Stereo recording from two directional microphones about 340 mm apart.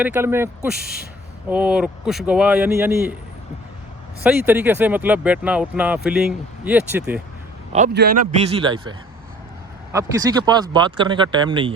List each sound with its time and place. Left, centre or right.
0.0 s speech: centre
4.2 s speech: centre
7.7 s a man's voice: right
8.6 s speech: centre